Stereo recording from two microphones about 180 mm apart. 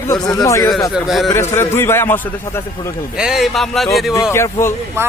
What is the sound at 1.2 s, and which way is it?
Speech, 15° left (ahead or behind).